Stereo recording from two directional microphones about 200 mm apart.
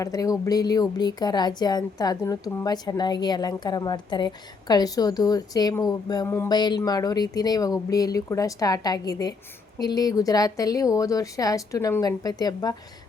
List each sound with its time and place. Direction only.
0.0 s a woman's voice: 15° left (ahead or behind)